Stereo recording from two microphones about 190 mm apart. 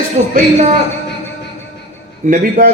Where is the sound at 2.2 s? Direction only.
45° right (ahead or behind).